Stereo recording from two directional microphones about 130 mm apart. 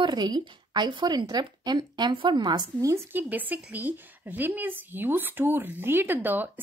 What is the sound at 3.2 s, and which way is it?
Speech, 15° right (ahead or behind).